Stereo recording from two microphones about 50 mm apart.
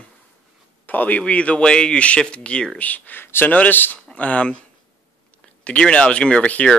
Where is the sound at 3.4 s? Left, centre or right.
Left.